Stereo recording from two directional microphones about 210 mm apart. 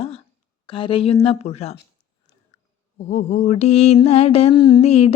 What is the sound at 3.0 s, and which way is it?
Music, 35° left (ahead or behind).